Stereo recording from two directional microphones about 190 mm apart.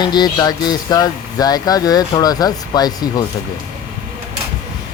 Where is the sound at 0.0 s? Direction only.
20° left (ahead or behind).